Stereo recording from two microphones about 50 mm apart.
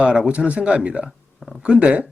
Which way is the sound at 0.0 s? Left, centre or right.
Right.